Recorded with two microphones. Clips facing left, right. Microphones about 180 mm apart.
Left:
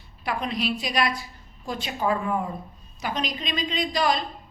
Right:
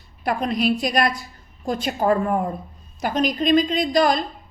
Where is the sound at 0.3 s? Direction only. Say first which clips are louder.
Right 6 dB; 45° right (ahead or behind).